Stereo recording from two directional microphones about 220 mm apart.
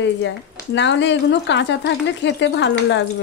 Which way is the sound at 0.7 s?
55° left (ahead or behind).